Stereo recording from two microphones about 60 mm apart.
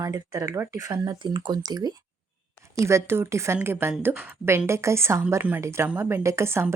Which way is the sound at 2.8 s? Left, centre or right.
Right.